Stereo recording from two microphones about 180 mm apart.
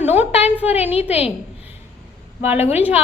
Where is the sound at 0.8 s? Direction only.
35° left (ahead or behind).